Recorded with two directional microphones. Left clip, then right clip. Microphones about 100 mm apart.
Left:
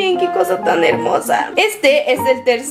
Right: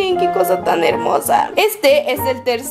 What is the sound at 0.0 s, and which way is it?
A woman's voice, 20° right (ahead or behind).